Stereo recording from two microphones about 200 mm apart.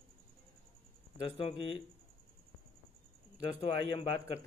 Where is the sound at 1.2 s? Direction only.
25° left (ahead or behind).